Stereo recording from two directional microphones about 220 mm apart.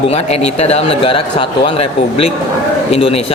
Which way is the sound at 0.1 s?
30° left (ahead or behind).